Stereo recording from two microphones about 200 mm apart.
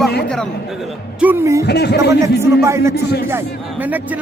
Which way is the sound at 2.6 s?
15° right (ahead or behind).